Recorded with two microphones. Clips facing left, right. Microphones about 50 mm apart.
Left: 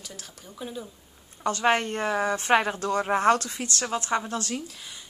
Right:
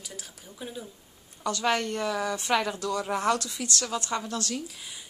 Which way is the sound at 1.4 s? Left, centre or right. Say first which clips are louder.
Left 3 dB; left.